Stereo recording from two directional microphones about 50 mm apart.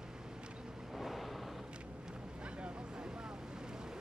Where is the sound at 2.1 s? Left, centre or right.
Centre.